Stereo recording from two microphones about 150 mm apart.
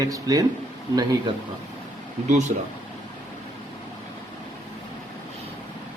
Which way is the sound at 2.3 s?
55° right (ahead or behind).